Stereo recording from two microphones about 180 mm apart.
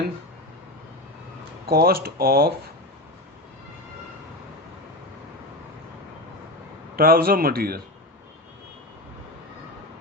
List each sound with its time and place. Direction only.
1.7 s a man's voice: 55° right (ahead or behind)
6.9 s a man's voice: 55° right (ahead or behind)